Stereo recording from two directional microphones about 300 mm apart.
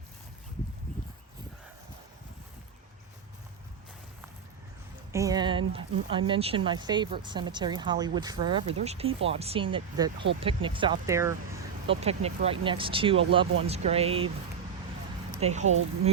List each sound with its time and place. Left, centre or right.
5.1 s speech: centre
11.9 s speech: right
15.4 s speech: right